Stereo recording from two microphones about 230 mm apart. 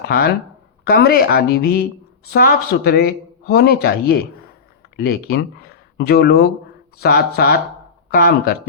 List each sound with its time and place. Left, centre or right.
0.9 s speech: left